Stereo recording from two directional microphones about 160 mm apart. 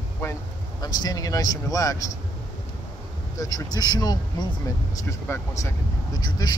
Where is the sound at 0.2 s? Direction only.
20° left (ahead or behind).